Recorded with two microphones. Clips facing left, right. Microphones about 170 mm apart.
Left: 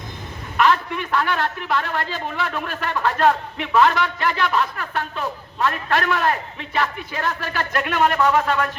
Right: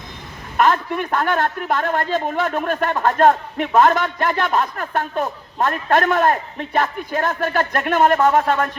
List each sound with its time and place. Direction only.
0.5 s a man's voice: 45° right (ahead or behind)